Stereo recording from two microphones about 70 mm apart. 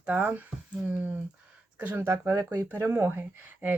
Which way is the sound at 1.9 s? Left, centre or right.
Right.